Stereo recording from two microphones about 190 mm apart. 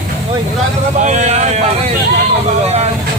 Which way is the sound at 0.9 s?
40° right (ahead or behind).